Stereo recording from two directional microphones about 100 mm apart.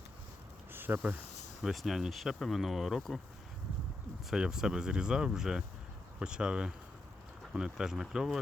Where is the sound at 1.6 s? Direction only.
Centre (ahead or behind).